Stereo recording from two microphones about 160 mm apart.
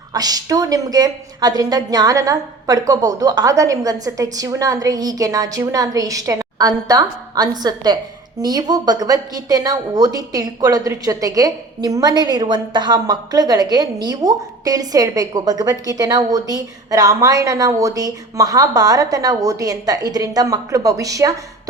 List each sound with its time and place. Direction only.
0.1 s a woman's voice: 25° right (ahead or behind)